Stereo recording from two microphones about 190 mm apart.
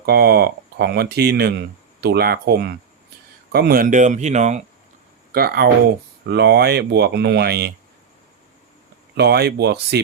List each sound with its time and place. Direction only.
0.0 s speech: 55° right (ahead or behind); by 4.6 s 35° right (ahead or behind)
5.3 s speech: 55° right (ahead or behind)
9.1 s speech: 60° right (ahead or behind)